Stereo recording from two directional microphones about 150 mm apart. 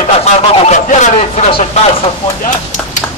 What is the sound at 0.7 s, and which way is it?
Speech, 55° left (ahead or behind).